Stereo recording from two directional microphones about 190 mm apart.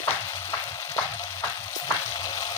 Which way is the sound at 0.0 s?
15° left (ahead or behind).